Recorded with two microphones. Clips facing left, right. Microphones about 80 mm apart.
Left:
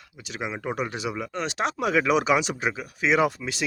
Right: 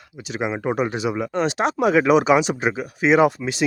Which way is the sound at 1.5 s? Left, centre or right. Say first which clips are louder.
Right 6 dB; centre.